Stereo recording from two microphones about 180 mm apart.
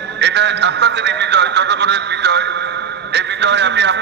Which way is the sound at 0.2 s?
70° right (ahead or behind).